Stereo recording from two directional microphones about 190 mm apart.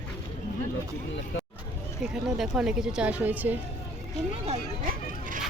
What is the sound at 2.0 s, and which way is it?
Speech, centre (ahead or behind).